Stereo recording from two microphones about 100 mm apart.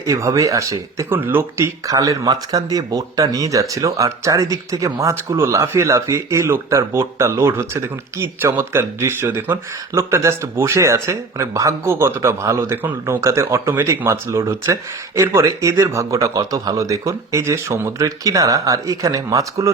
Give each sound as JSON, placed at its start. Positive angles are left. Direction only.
{"t": 0.1, "sound": "speech", "side_deg": -30}
{"t": 1.1, "sound": "speech", "side_deg": -20}